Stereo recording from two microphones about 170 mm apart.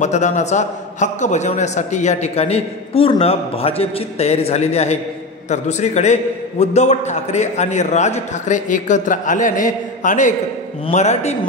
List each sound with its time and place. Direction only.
0.0 s a man's voice: 45° left (ahead or behind)